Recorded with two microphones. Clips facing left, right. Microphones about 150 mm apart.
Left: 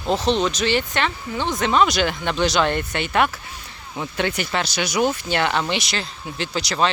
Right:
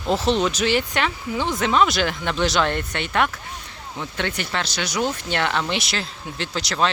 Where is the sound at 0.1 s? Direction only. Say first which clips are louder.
Even; 5° right (ahead or behind).